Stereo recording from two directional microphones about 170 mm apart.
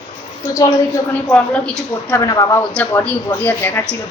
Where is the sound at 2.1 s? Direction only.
20° left (ahead or behind).